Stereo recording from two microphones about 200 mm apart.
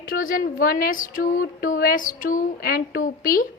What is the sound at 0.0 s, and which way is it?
A woman's voice, 45° left (ahead or behind).